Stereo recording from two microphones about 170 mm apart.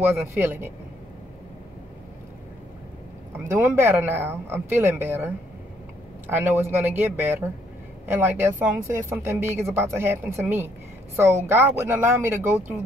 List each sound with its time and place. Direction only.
0.2 s speech: 15° right (ahead or behind)
3.4 s speech: 15° right (ahead or behind)